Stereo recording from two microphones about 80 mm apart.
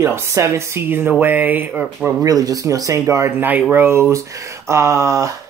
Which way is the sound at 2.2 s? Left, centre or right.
Right.